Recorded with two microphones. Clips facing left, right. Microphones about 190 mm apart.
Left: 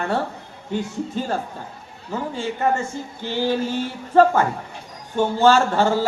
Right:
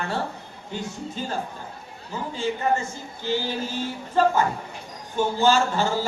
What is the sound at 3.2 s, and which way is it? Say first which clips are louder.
A man's voice: left 4 dB; 60° left (ahead or behind).